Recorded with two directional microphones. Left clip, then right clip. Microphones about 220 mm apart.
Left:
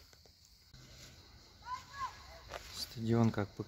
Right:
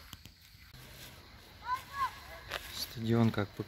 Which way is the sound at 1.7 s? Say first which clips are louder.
Right 7 dB; centre (ahead or behind).